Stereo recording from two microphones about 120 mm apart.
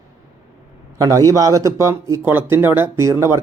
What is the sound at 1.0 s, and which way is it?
Speech, 30° right (ahead or behind).